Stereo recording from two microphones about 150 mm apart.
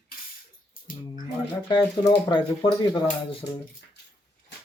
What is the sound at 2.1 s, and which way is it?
Speech, 30° left (ahead or behind).